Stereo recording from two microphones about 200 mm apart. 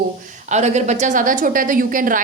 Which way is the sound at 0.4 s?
35° right (ahead or behind).